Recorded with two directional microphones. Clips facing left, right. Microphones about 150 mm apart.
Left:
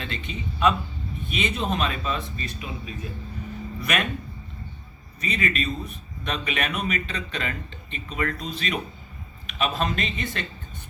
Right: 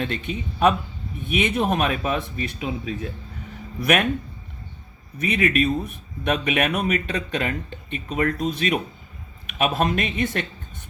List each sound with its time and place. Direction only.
0.0 s a man's voice: 55° right (ahead or behind); by 2.9 s 70° right (ahead or behind)
3.8 s speech: 60° right (ahead or behind)
5.2 s a man's voice: 60° right (ahead or behind)